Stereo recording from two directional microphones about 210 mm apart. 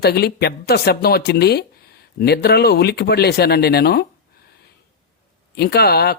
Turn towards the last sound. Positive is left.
turn(degrees=50)  # may be behind; listen again after turning